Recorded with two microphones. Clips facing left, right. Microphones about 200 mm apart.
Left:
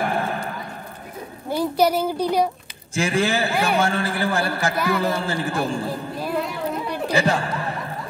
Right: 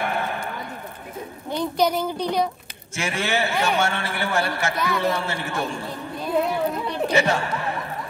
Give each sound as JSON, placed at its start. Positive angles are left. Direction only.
{"t": 0.0, "sound": "horse", "side_deg": 35}
{"t": 1.5, "sound": "speech", "side_deg": 5}
{"t": 2.9, "sound": "a man's voice", "side_deg": 35}
{"t": 7.1, "sound": "a man's voice", "side_deg": 35}